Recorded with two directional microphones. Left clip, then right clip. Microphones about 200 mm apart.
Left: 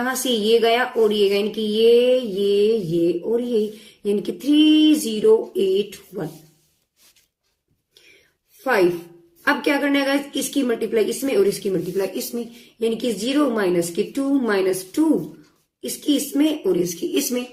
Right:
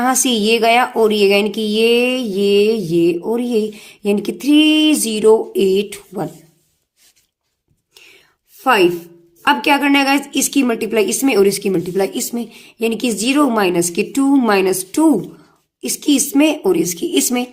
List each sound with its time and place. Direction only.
0.0 s a woman's voice: 55° right (ahead or behind)
9.4 s a woman's voice: 55° right (ahead or behind)